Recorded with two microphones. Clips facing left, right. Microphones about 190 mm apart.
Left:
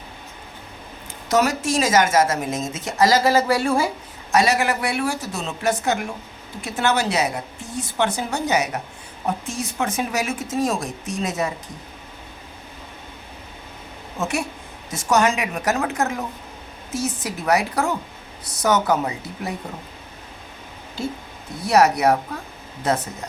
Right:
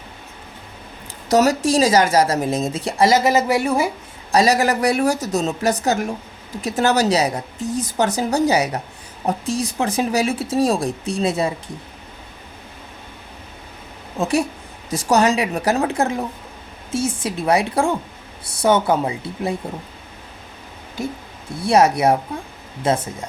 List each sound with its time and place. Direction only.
1.3 s speech: 35° right (ahead or behind); by 3.8 s 20° right (ahead or behind)
4.3 s speech: 35° right (ahead or behind)
14.2 s speech: 35° right (ahead or behind)
21.6 s speech: 25° right (ahead or behind)